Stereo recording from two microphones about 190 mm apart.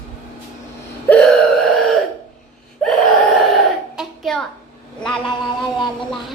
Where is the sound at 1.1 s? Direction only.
10° left (ahead or behind).